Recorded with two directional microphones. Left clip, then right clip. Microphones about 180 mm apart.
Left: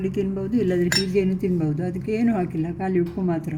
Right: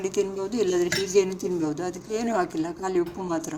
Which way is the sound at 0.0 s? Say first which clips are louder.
Even; 5° left (ahead or behind).